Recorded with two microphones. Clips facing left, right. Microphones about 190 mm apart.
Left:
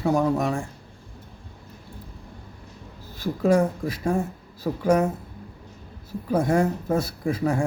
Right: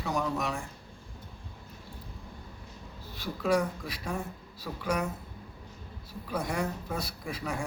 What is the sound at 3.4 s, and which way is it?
Speech, 45° left (ahead or behind).